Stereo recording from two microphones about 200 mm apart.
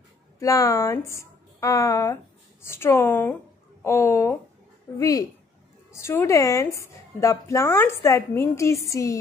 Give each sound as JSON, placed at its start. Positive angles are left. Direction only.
{"t": 0.4, "sound": "a woman's voice", "side_deg": 15}